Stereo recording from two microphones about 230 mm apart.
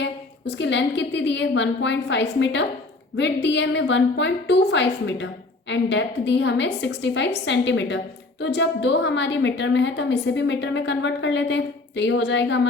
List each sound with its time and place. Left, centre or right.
0.0 s a woman's voice: left